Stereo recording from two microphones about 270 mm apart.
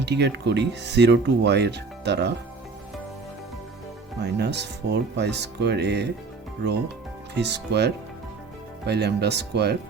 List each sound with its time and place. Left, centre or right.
0.0 s speech: right
4.2 s speech: right
7.3 s speech: right